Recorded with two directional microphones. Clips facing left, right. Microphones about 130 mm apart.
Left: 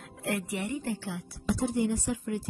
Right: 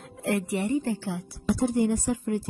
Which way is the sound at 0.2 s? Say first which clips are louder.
Right 5 dB; 35° right (ahead or behind).